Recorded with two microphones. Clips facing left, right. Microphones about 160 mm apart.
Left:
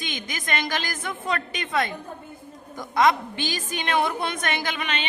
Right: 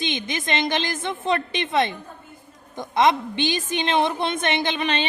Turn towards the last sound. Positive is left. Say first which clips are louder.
# right 5 dB
turn(degrees=-30)  # may be behind; listen again after turning